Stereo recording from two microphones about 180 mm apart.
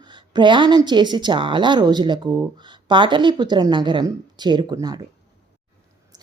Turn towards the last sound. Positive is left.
turn(degrees=-20)  # may be behind; listen again after turning